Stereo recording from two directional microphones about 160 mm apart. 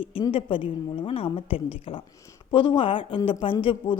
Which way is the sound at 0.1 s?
35° left (ahead or behind).